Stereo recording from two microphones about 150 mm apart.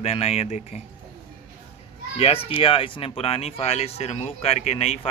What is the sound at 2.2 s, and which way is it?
Speech, 40° left (ahead or behind).